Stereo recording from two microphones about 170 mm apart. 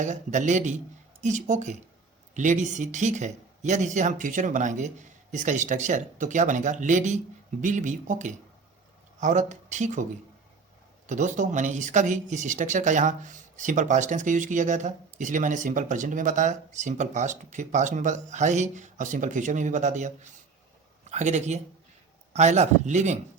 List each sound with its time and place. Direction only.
0.0 s speech: 45° right (ahead or behind)